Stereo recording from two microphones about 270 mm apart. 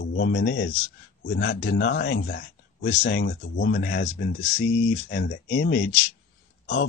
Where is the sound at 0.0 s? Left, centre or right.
Left.